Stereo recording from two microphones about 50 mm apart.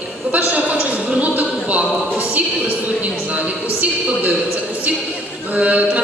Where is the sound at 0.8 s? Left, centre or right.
Right.